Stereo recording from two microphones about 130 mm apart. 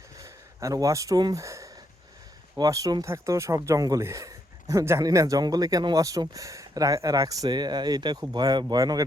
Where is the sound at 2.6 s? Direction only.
25° right (ahead or behind).